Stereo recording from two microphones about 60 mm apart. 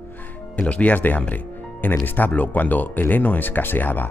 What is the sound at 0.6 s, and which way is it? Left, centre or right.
Speech, left.